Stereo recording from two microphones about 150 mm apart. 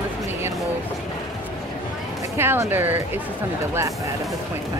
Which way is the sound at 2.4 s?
15° right (ahead or behind).